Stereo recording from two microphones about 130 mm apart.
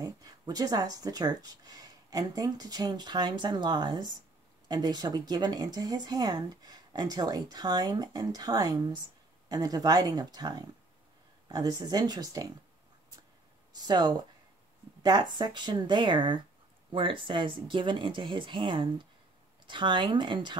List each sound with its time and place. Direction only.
0.0 s speech: 30° right (ahead or behind)
13.7 s speech: 30° right (ahead or behind)